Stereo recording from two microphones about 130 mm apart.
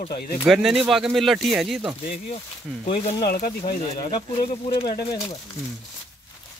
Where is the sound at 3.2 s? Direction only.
90° left.